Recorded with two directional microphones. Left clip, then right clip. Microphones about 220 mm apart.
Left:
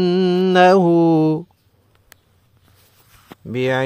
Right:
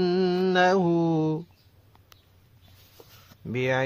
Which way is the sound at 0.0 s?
30° left (ahead or behind).